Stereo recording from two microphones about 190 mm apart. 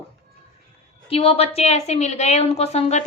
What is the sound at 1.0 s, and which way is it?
A woman's voice, 30° left (ahead or behind).